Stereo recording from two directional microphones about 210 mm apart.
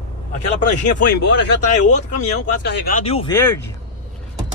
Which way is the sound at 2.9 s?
30° left (ahead or behind).